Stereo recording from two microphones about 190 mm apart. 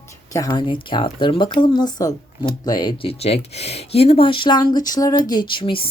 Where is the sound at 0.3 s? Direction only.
20° left (ahead or behind).